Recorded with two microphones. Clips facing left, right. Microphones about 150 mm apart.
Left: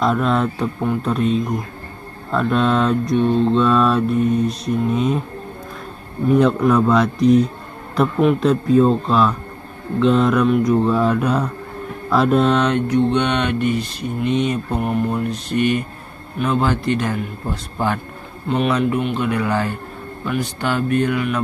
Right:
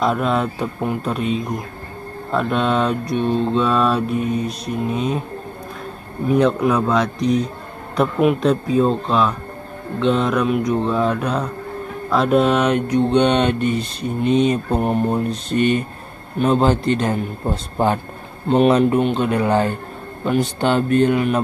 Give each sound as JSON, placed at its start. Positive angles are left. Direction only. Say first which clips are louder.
{"t": 0.0, "sound": "mantra", "louder": "left 1 dB", "side_deg": 0}
{"t": 6.2, "sound": "mantra", "louder": "left 1 dB", "side_deg": 0}
{"t": 7.9, "sound": "speech", "louder": "even", "side_deg": 0}
{"t": 8.4, "sound": "mantra", "louder": "left 2 dB", "side_deg": 0}
{"t": 12.1, "sound": "speech", "louder": "even", "side_deg": 0}